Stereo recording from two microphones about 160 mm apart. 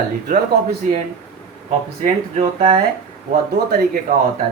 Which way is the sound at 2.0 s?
45° right (ahead or behind).